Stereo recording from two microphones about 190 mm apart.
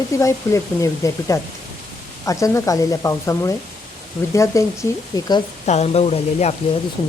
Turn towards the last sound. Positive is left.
turn(degrees=35)  # may be behind; listen again after turning